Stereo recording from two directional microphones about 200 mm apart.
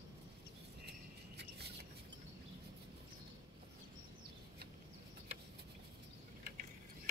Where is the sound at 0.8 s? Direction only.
55° right (ahead or behind).